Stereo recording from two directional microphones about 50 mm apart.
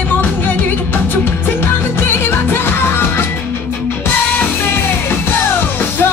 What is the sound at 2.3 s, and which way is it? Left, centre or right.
Music, left.